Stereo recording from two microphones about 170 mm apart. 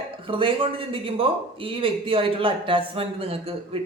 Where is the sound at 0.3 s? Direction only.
30° right (ahead or behind).